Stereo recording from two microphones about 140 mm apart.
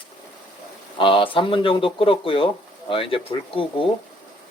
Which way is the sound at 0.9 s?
40° left (ahead or behind).